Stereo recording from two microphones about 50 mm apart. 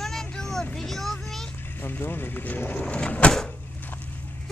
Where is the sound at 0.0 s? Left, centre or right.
Centre.